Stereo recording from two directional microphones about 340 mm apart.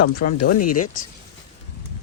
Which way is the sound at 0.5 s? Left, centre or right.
Left.